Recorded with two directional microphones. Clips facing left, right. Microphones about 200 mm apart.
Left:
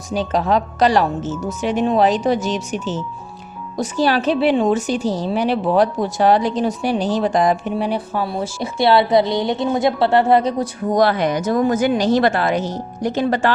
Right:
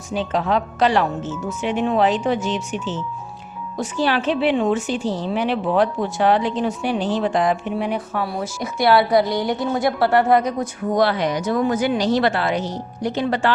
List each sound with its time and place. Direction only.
0.1 s a woman's voice: 40° left (ahead or behind)